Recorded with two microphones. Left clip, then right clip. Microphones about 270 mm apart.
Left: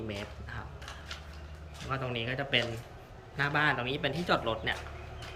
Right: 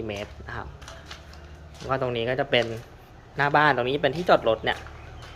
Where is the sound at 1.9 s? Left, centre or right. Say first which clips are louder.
Right 9 dB; centre.